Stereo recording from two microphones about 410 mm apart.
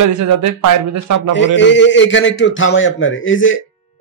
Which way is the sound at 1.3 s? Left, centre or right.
Left.